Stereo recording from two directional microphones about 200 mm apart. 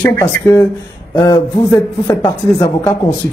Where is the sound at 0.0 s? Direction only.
15° left (ahead or behind).